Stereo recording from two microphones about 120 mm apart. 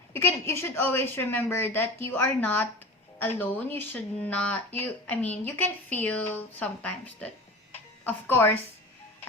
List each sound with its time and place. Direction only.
0.1 s speech: 20° left (ahead or behind)